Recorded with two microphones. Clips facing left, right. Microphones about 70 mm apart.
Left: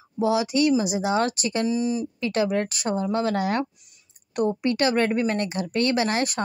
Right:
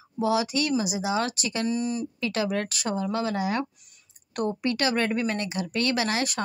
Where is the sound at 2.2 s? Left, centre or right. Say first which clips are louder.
Left 4 dB; left.